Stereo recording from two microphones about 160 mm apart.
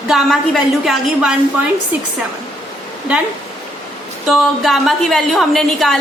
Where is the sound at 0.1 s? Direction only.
Centre (ahead or behind).